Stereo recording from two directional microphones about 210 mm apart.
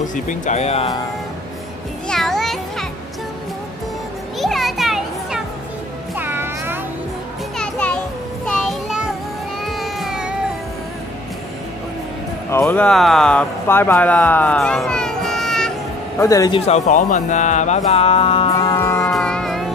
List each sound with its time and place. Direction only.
0.0 s speech: 35° left (ahead or behind)
2.0 s children playing: centre (ahead or behind)
4.4 s children playing: centre (ahead or behind)
6.1 s music: 10° right (ahead or behind)
7.5 s children playing: 5° left (ahead or behind)
8.5 s music: centre (ahead or behind)
9.7 s a sound: centre (ahead or behind)
12.4 s speech: 15° left (ahead or behind)
16.2 s a man's voice: 15° left (ahead or behind)
18.8 s music: 10° left (ahead or behind)